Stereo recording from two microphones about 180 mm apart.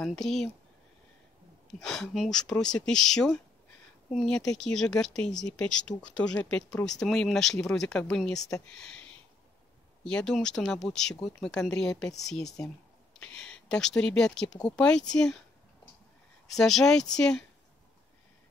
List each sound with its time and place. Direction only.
0.0 s speech: 5° left (ahead or behind)
1.8 s speech: 5° left (ahead or behind)
16.4 s speech: centre (ahead or behind)